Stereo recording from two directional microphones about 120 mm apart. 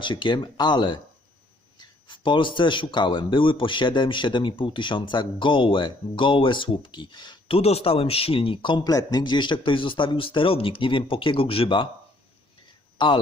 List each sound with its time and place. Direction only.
0.0 s a man's voice: 40° left (ahead or behind)
13.0 s speech: 40° left (ahead or behind)